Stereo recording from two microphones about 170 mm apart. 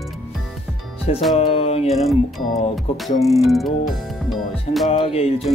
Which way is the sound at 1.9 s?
Centre (ahead or behind).